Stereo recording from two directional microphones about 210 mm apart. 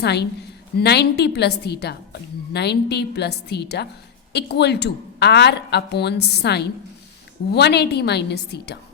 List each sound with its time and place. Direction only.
0.0 s a woman's voice: 55° left (ahead or behind)